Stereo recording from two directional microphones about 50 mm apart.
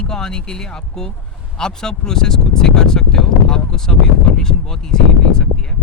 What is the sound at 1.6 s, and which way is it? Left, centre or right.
Speech, centre.